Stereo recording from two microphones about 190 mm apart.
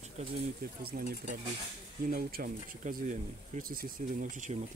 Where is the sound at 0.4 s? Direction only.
50° right (ahead or behind).